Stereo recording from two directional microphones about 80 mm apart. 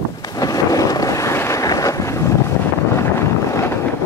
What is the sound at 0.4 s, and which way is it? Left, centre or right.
Boat, left.